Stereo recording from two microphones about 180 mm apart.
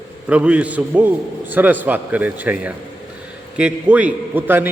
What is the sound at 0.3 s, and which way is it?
A man's voice, 5° right (ahead or behind).